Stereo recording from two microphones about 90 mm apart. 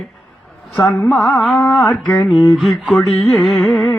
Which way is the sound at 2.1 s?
Centre (ahead or behind).